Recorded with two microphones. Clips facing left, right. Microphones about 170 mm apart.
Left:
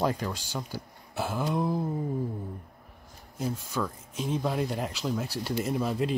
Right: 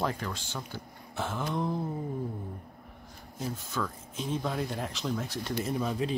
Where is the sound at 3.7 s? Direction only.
5° left (ahead or behind).